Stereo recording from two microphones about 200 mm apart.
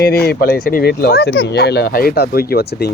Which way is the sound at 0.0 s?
50° left (ahead or behind).